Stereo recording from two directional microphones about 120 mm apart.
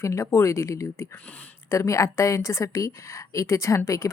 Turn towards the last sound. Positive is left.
turn(degrees=25)  # may be behind; listen again after turning